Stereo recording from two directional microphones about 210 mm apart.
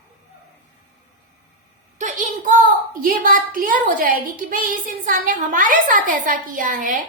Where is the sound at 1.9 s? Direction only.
35° right (ahead or behind).